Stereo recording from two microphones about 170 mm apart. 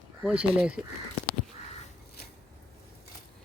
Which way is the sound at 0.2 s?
5° right (ahead or behind).